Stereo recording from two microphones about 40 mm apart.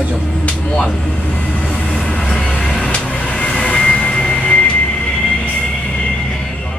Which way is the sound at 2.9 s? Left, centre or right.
Left.